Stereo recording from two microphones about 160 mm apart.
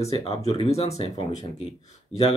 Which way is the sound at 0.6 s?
40° left (ahead or behind).